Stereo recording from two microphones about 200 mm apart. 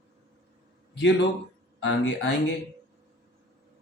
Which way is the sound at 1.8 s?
65° left (ahead or behind).